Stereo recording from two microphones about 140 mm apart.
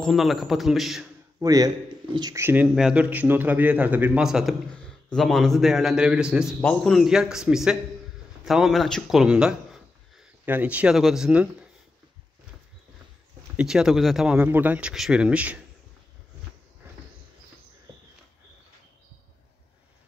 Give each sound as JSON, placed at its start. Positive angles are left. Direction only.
{"t": 0.0, "sound": "a man's voice", "side_deg": 0}
{"t": 1.4, "sound": "speech", "side_deg": -25}
{"t": 2.4, "sound": "a man's voice", "side_deg": -10}
{"t": 6.6, "sound": "a man's voice", "side_deg": 5}
{"t": 13.6, "sound": "speech", "side_deg": -5}